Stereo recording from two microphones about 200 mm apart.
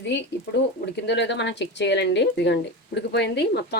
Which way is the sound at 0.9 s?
60° left (ahead or behind).